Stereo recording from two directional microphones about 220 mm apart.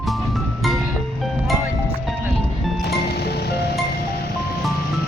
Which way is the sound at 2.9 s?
45° left (ahead or behind).